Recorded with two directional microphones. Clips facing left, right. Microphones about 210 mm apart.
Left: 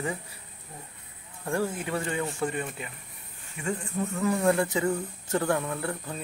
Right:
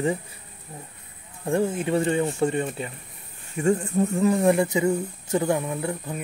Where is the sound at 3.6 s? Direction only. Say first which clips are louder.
Right 10 dB; 45° right (ahead or behind).